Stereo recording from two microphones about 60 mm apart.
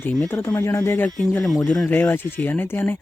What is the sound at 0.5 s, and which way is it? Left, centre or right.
Speech, left.